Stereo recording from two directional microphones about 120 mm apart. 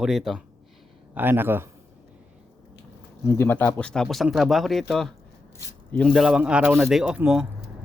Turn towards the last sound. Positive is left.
turn(degrees=-10)  # may be behind; listen again after turning